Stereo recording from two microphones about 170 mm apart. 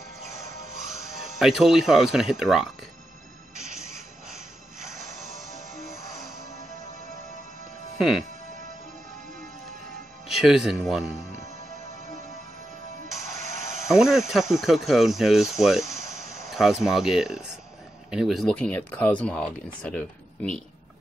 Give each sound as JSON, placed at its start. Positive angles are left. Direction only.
{"t": 1.4, "sound": "speech", "side_deg": 0}
{"t": 8.0, "sound": "speech", "side_deg": 0}
{"t": 10.2, "sound": "speech", "side_deg": 0}
{"t": 13.4, "sound": "a sound", "side_deg": -45}
{"t": 13.8, "sound": "speech", "side_deg": 0}